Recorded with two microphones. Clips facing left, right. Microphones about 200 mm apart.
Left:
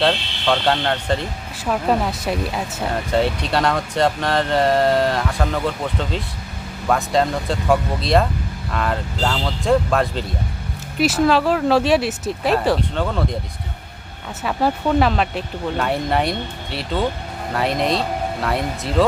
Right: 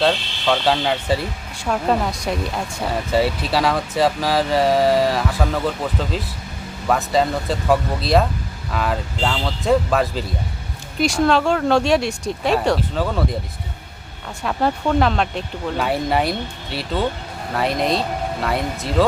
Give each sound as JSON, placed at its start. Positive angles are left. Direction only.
{"t": 0.0, "sound": "speech", "side_deg": 0}
{"t": 14.4, "sound": "speech", "side_deg": 0}